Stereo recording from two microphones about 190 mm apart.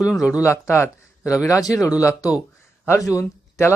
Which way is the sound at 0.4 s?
15° left (ahead or behind).